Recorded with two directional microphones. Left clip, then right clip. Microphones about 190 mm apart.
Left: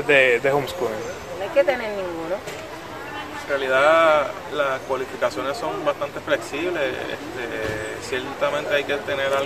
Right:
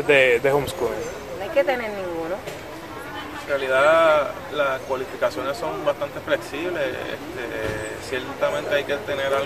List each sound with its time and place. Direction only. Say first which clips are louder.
0.0 s a man's voice: even; 20° right (ahead or behind)
3.5 s speech: even; 15° left (ahead or behind)
8.1 s speech: even; 15° left (ahead or behind)